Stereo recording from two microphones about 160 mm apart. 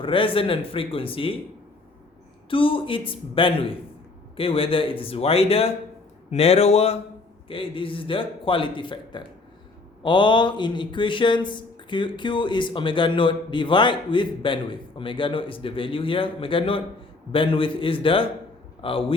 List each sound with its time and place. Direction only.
0.0 s speech: 35° left (ahead or behind)
2.5 s a man's voice: 35° left (ahead or behind)